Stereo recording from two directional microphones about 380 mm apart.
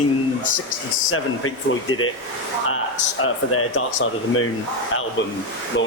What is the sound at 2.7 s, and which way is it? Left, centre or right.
Speech, left.